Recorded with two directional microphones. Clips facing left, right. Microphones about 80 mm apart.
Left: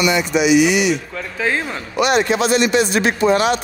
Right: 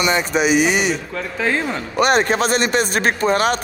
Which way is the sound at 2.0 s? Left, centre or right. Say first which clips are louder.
Even; right.